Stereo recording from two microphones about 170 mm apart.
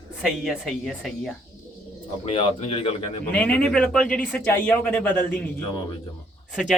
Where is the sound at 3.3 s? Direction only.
5° left (ahead or behind).